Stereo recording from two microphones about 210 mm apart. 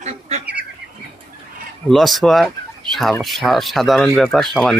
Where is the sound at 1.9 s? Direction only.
Centre (ahead or behind).